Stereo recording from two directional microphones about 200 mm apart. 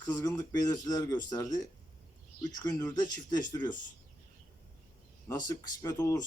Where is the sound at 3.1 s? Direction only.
15° left (ahead or behind).